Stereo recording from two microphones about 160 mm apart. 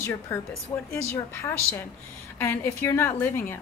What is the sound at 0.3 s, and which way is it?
A woman's voice, 15° left (ahead or behind).